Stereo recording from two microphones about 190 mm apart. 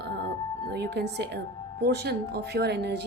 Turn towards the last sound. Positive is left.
turn(degrees=-60)  # may be behind; listen again after turning